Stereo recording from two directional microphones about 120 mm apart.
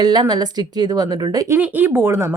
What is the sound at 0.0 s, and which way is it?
Speech, 35° right (ahead or behind).